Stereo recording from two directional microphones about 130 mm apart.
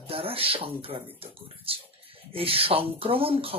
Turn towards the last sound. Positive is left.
turn(degrees=-45)  # may be behind; listen again after turning